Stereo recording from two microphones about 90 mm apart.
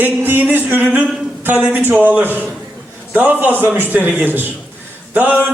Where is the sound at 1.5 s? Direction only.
20° right (ahead or behind).